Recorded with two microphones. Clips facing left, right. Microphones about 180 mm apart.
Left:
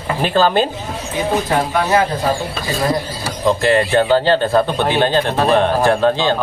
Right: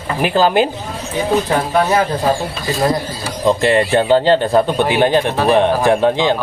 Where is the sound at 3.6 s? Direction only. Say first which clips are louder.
Left 1 dB; 20° right (ahead or behind).